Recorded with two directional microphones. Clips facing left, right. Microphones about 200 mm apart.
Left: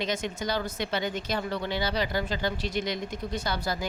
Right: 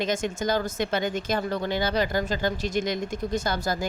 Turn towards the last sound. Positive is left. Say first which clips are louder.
# right 4 dB
turn(degrees=-45)  # may be behind; listen again after turning